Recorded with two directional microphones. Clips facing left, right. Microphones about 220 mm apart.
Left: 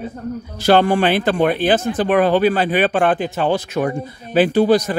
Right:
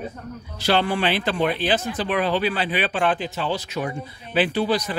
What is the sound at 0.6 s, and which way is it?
Speech, 50° left (ahead or behind).